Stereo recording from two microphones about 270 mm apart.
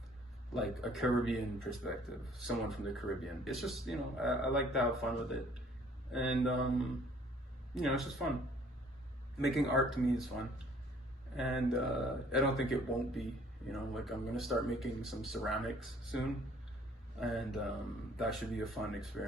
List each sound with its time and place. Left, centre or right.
0.5 s speech: centre
9.4 s speech: centre
11.3 s speech: centre